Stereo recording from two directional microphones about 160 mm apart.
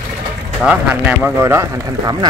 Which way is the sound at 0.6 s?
10° right (ahead or behind).